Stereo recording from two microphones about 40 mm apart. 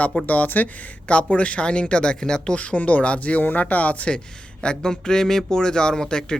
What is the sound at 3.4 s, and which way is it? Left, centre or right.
Speech, left.